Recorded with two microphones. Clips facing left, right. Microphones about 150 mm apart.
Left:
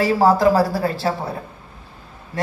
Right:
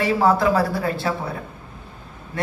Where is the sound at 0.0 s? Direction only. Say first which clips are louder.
Left 3 dB; 35° left (ahead or behind).